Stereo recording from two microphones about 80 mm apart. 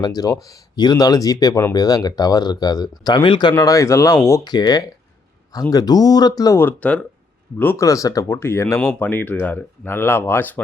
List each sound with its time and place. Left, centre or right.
0.0 s speech: left
0.8 s speech: left
3.6 s speech: left
4.4 s speech: left
6.8 s speech: centre
7.8 s speech: left
8.4 s speech: left